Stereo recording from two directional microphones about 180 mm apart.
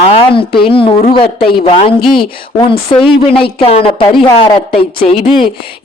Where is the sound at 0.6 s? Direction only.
30° left (ahead or behind).